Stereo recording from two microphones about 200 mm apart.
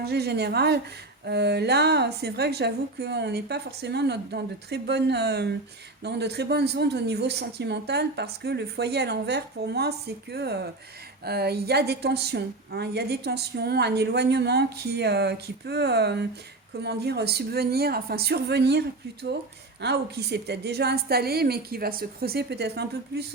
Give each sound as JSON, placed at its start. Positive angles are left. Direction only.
{"t": 0.0, "sound": "a woman's voice", "side_deg": -55}